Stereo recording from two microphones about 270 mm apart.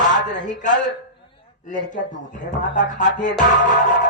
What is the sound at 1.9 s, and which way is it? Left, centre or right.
Music, left.